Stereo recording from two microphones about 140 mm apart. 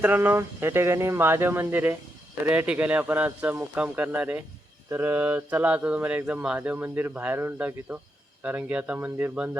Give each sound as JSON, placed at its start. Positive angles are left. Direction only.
{"t": 0.0, "sound": "speech", "side_deg": -10}